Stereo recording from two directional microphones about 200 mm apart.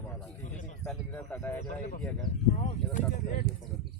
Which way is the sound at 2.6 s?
40° left (ahead or behind).